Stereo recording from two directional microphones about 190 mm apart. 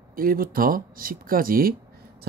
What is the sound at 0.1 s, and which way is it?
Speech, 50° right (ahead or behind).